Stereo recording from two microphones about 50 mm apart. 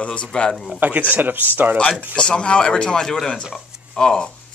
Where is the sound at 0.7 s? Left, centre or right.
Right.